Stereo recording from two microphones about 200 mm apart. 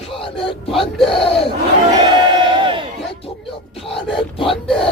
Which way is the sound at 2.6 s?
25° right (ahead or behind).